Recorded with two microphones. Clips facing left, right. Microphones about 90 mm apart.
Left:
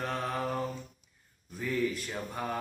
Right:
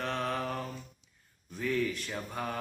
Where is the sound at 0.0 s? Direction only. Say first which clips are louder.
Even; 5° left (ahead or behind).